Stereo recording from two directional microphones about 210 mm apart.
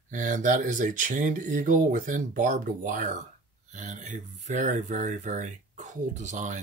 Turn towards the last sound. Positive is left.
turn(degrees=-35)  # may be behind; listen again after turning